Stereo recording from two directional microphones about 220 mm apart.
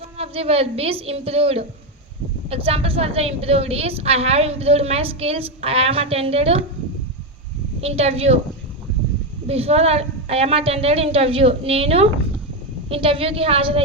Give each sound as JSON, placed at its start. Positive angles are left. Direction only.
{"t": 0.2, "sound": "a woman's voice", "side_deg": -25}
{"t": 7.8, "sound": "a woman's voice", "side_deg": -25}
{"t": 9.5, "sound": "a woman's voice", "side_deg": -30}